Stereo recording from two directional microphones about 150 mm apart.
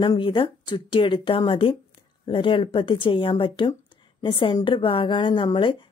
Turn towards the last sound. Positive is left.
turn(degrees=35)  # may be behind; listen again after turning